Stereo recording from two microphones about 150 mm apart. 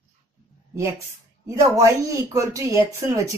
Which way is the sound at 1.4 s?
20° right (ahead or behind).